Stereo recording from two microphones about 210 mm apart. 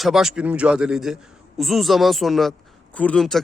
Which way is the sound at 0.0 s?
Centre (ahead or behind).